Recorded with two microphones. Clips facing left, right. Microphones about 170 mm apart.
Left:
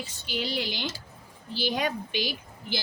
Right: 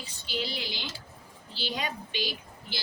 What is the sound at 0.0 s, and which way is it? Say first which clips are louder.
Speech: left 2 dB; 55° left (ahead or behind).